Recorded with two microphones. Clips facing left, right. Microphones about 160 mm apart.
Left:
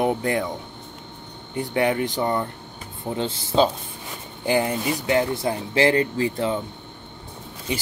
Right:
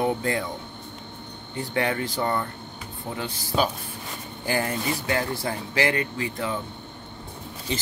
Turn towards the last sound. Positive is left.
turn(degrees=15)  # may be behind; listen again after turning